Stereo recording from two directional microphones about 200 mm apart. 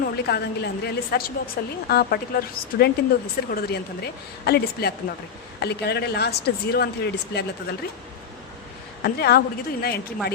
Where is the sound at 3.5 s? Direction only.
50° left (ahead or behind).